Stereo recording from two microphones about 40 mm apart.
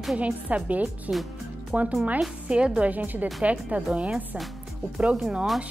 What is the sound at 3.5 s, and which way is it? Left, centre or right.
Speech, right.